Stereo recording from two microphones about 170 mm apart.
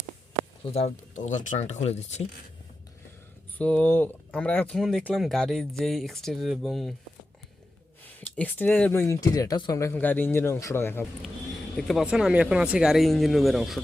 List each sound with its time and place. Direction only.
0.7 s speech: 40° left (ahead or behind)
3.6 s speech: 10° left (ahead or behind)
8.2 s speech: 10° left (ahead or behind)
11.8 s speech: centre (ahead or behind)